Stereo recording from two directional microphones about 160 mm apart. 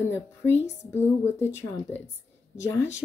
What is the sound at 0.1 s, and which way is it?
A woman's voice, 15° left (ahead or behind).